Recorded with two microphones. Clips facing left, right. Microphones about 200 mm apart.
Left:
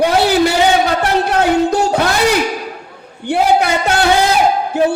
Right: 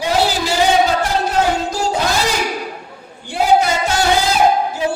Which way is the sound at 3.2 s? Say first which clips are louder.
Left 2 dB; 60° left (ahead or behind).